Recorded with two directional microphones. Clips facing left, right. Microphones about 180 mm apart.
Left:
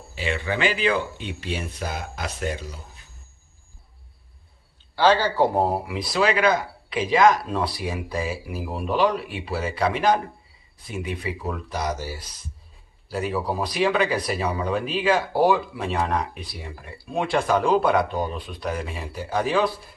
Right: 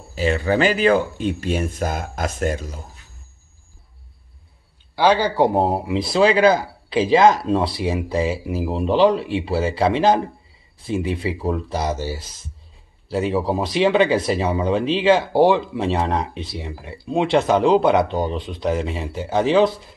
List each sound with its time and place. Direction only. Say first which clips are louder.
0.1 s speech: right 8 dB; 40° right (ahead or behind)
4.9 s speech: right 2 dB; 15° right (ahead or behind)